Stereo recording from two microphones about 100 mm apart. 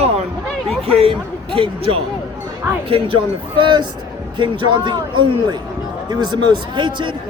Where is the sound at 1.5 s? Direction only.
60° right (ahead or behind).